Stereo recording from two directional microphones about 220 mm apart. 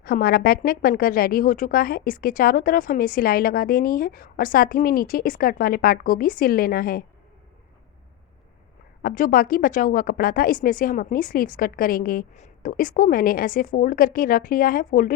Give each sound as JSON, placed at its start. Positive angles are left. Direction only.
{"t": 0.0, "sound": "speech", "side_deg": 40}
{"t": 9.0, "sound": "speech", "side_deg": 40}